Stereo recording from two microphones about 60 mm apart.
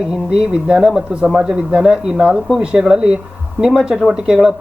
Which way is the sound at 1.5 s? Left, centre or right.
Centre.